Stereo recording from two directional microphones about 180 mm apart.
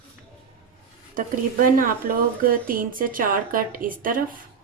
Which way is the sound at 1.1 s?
50° right (ahead or behind).